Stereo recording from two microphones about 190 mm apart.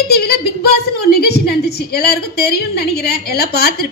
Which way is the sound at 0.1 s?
55° left (ahead or behind).